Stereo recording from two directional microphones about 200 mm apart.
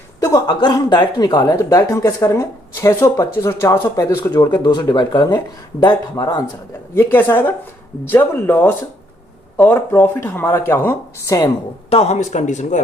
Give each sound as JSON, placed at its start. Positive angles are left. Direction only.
{"t": 0.2, "sound": "speech", "side_deg": 20}
{"t": 11.9, "sound": "a man's voice", "side_deg": 30}